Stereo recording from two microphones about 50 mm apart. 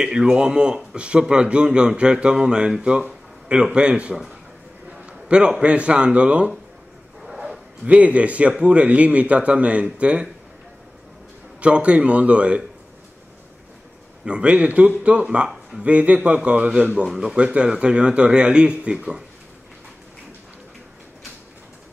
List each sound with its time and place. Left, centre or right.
0.0 s a man's voice: centre
4.9 s a sound: centre
5.6 s a man's voice: right
7.8 s a man's voice: right
11.6 s a man's voice: right
14.2 s a man's voice: right
17.1 s a man's voice: centre